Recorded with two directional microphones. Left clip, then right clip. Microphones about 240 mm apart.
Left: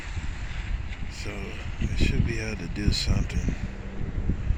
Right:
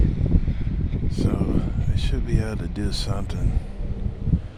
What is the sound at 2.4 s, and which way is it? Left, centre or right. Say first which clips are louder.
Speech: right 2 dB; centre.